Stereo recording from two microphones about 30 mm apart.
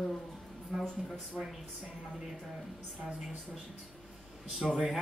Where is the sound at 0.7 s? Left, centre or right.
Centre.